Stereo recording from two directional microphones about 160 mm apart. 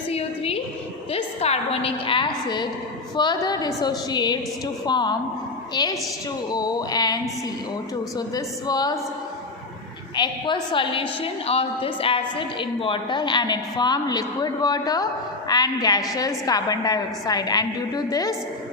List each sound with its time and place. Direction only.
0.1 s a sound: 40° left (ahead or behind)
1.1 s a woman's voice: 40° left (ahead or behind)
10.2 s a woman's voice: 30° left (ahead or behind)